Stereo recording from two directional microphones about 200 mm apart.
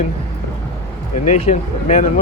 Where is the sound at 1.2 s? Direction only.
35° left (ahead or behind).